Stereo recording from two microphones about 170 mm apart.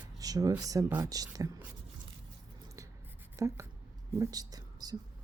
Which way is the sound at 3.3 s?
20° right (ahead or behind).